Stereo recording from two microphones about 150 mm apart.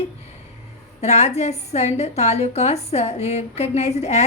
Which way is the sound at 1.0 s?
45° left (ahead or behind).